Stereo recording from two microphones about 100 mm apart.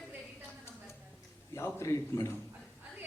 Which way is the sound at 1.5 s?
30° left (ahead or behind).